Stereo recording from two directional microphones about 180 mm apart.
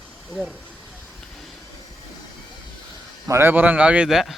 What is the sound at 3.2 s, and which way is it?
A man's voice, 15° right (ahead or behind).